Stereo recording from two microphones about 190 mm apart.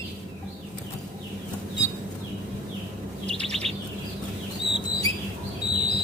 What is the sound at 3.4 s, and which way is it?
Chirp, 35° right (ahead or behind).